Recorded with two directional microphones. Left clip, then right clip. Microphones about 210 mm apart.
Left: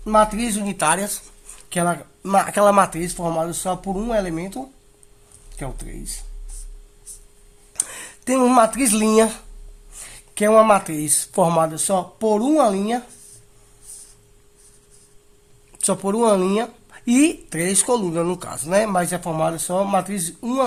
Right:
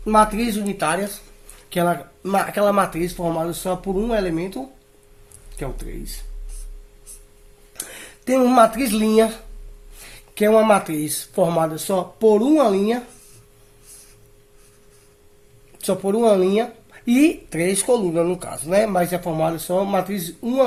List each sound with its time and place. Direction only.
0.0 s speech: 35° left (ahead or behind); by 1.2 s 60° left (ahead or behind)
1.7 s speech: 40° left (ahead or behind)
7.7 s speech: 50° left (ahead or behind)
15.8 s speech: 45° left (ahead or behind)